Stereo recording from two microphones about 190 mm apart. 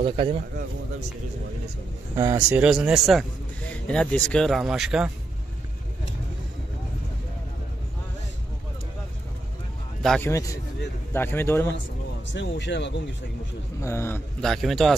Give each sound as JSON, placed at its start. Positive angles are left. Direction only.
{"t": 0.0, "sound": "a man's voice", "side_deg": -30}
{"t": 2.1, "sound": "speech", "side_deg": -15}
{"t": 2.6, "sound": "speech", "side_deg": -5}
{"t": 10.0, "sound": "speech", "side_deg": 5}
{"t": 10.3, "sound": "a man's voice", "side_deg": 15}
{"t": 12.4, "sound": "speech", "side_deg": 70}
{"t": 13.7, "sound": "a man's voice", "side_deg": 15}
{"t": 14.4, "sound": "speech", "side_deg": 0}